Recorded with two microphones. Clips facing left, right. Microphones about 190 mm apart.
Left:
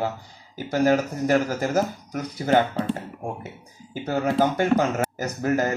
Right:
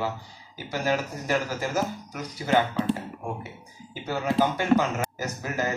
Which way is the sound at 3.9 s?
50° left (ahead or behind).